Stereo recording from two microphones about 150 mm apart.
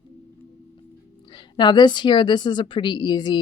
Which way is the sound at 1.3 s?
30° left (ahead or behind).